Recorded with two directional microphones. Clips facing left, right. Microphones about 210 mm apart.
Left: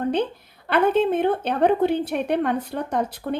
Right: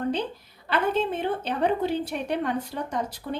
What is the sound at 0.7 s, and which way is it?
A woman's voice, 55° left (ahead or behind).